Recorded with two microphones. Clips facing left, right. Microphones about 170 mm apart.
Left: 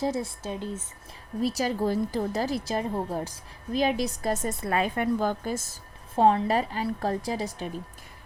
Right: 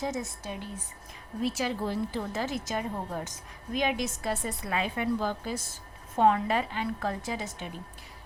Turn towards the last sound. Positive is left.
turn(degrees=35)  # may be behind; listen again after turning